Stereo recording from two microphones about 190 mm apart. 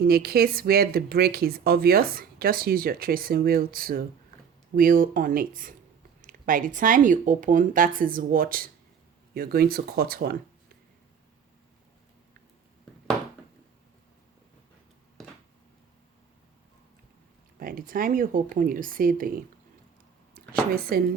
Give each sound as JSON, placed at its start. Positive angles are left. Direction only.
{"t": 0.0, "sound": "speech", "side_deg": -50}
{"t": 17.6, "sound": "speech", "side_deg": -50}